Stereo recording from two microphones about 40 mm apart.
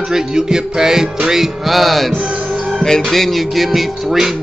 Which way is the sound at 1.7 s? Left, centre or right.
Centre.